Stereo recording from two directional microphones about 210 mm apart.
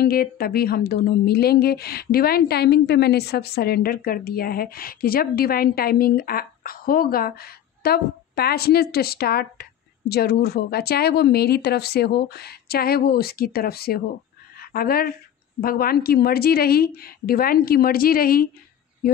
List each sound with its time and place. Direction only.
0.0 s a woman's voice: 45° left (ahead or behind)